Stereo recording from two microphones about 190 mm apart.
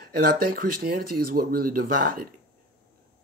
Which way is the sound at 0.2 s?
50° right (ahead or behind).